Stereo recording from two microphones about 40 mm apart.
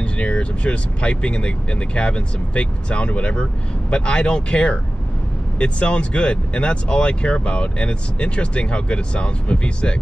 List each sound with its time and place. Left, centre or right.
0.0 s speech: left